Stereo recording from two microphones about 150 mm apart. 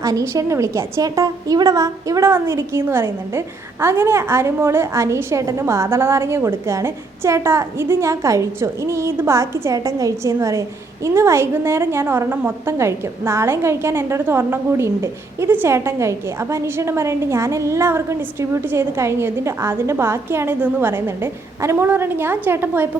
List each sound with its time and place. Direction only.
0.0 s a woman's voice: 20° right (ahead or behind)